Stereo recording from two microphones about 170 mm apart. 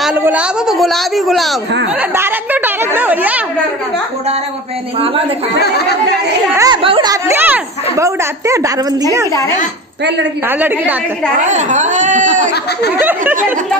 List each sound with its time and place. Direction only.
0.2 s a woman's voice: 5° right (ahead or behind)
2.0 s a woman's voice: 10° right (ahead or behind)
5.6 s speech: 70° left (ahead or behind)
6.5 s speech: 20° right (ahead or behind)
11.4 s speech: 45° right (ahead or behind)
13.0 s a woman's voice: 15° right (ahead or behind)